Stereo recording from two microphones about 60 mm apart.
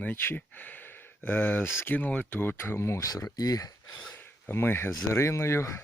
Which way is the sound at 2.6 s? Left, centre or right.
Left.